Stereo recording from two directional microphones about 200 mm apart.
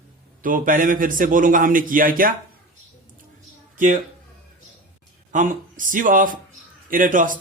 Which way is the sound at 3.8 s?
40° right (ahead or behind).